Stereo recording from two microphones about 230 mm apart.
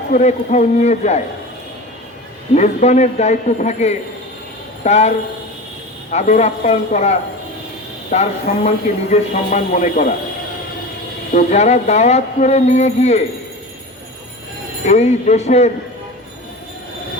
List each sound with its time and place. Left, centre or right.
0.1 s speech: left
2.6 s speech: left
11.3 s speech: left
14.8 s speech: left